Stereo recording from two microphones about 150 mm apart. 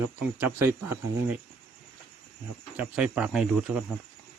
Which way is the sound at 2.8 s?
5° right (ahead or behind).